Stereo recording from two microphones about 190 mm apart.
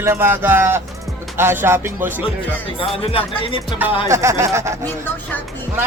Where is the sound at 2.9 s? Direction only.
30° left (ahead or behind).